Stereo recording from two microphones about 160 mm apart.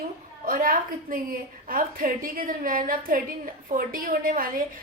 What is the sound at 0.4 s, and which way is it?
A woman's voice, 60° right (ahead or behind).